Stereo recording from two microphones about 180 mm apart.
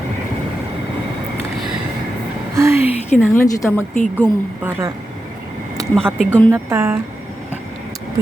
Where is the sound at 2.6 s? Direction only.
15° right (ahead or behind).